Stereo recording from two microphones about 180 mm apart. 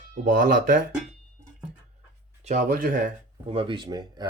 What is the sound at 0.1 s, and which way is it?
Speech, 50° right (ahead or behind).